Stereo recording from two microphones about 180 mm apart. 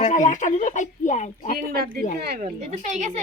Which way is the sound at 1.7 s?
60° right (ahead or behind).